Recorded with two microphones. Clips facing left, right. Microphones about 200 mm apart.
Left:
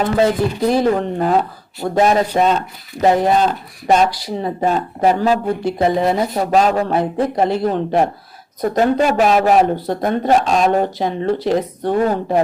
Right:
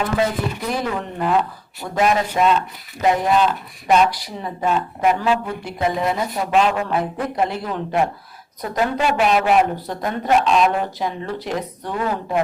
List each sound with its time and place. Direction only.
0.6 s speech: 35° left (ahead or behind)
10.9 s speech: 30° left (ahead or behind)